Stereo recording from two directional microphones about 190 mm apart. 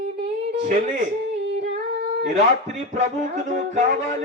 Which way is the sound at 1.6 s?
35° right (ahead or behind).